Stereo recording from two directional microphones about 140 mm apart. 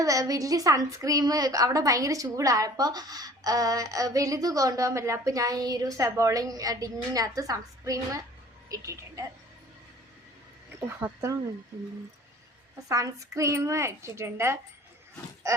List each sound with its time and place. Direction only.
0.0 s a woman's voice: 25° right (ahead or behind)
10.8 s a woman's voice: 15° right (ahead or behind)
12.9 s a woman's voice: 25° right (ahead or behind)